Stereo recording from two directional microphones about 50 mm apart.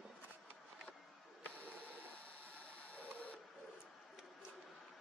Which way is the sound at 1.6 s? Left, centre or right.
Left.